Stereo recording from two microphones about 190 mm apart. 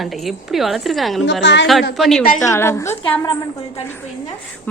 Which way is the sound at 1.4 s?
70° left (ahead or behind).